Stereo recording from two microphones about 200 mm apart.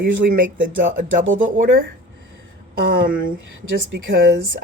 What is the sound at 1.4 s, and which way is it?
Speech, 40° right (ahead or behind).